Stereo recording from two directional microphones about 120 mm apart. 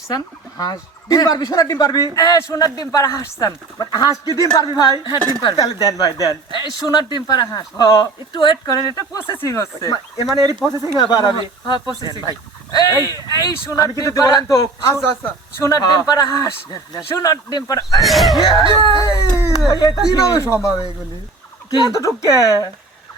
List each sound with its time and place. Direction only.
0.1 s speech: 35° left (ahead or behind)
10.3 s speech: 30° right (ahead or behind)
10.9 s speech: 35° left (ahead or behind)
11.9 s speech: 30° right (ahead or behind)
12.7 s speech: 30° left (ahead or behind)
15.8 s speech: 35° left (ahead or behind)
18.0 s speech: centre (ahead or behind)
18.6 s speech: 40° right (ahead or behind)
19.0 s speech: 25° left (ahead or behind)
21.7 s speech: 30° left (ahead or behind)